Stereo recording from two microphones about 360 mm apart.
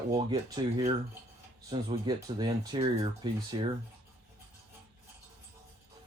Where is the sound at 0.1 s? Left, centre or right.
Centre.